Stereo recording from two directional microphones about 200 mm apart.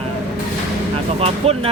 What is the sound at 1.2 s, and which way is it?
Speech, 30° right (ahead or behind).